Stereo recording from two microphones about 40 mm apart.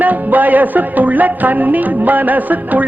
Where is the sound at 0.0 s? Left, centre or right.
Right.